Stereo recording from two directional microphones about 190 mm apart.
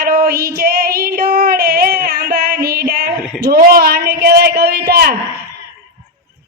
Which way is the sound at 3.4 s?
55° right (ahead or behind).